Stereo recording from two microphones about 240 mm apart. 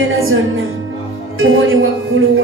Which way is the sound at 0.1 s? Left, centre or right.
Right.